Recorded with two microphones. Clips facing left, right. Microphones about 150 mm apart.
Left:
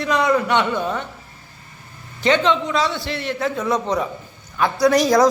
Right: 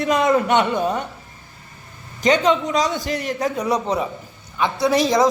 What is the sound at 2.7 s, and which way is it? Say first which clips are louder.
Speech: right 1 dB; 40° right (ahead or behind).